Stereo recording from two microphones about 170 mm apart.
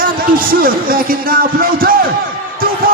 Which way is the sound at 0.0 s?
55° right (ahead or behind).